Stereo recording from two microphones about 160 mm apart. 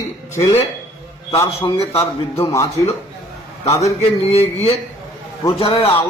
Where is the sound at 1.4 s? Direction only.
35° left (ahead or behind).